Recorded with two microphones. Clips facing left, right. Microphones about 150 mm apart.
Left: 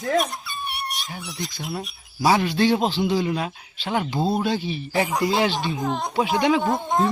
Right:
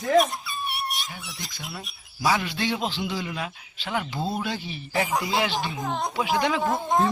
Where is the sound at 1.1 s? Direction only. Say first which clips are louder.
Left 7 dB; centre (ahead or behind).